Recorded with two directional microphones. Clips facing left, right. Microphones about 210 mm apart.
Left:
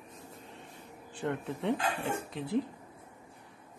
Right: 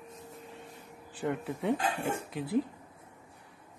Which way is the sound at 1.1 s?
5° right (ahead or behind).